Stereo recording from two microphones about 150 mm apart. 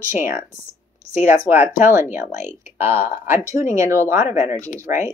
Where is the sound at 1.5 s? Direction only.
15° right (ahead or behind).